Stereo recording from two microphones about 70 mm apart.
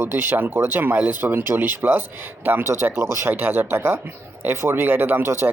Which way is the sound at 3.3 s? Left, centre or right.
Right.